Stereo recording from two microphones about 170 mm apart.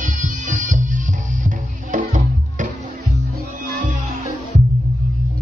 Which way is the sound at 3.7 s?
50° right (ahead or behind).